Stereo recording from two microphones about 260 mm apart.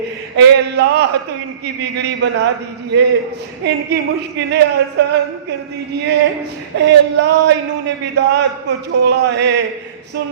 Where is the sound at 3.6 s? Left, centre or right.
Right.